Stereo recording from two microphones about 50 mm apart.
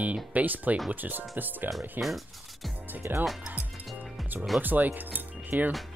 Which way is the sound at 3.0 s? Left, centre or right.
Right.